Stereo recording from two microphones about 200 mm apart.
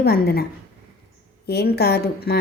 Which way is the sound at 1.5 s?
55° left (ahead or behind).